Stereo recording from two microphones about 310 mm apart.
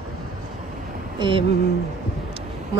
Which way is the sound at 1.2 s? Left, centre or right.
Centre.